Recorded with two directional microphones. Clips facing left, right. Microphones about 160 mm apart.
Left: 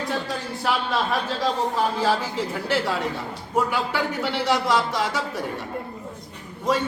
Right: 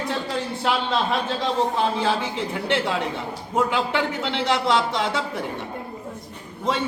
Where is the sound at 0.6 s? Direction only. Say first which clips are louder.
Even; 25° right (ahead or behind).